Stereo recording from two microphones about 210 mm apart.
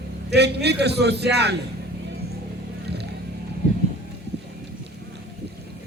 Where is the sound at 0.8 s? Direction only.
55° right (ahead or behind).